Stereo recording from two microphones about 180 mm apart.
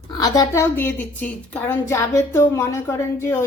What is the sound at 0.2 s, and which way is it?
A woman's voice, 15° left (ahead or behind).